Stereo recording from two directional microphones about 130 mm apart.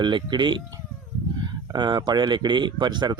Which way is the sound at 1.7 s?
35° right (ahead or behind).